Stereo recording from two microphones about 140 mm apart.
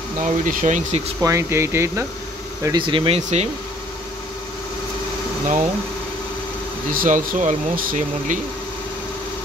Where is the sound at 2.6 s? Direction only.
35° right (ahead or behind).